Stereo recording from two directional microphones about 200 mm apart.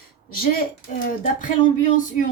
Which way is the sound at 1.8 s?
40° left (ahead or behind).